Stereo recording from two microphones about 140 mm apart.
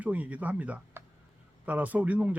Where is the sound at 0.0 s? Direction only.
10° right (ahead or behind).